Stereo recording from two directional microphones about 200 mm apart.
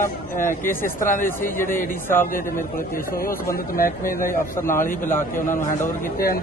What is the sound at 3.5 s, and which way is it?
Speech, 45° left (ahead or behind).